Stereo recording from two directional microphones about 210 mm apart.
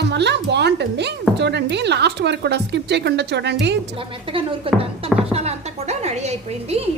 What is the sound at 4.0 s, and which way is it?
A woman's voice, 25° right (ahead or behind).